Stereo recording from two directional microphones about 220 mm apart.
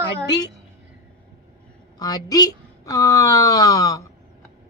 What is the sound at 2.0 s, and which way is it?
A woman's voice, 20° left (ahead or behind).